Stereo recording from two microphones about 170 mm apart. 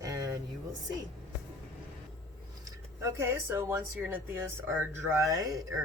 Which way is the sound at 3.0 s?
15° right (ahead or behind).